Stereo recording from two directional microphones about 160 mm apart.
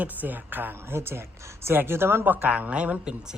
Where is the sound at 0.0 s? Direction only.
10° right (ahead or behind).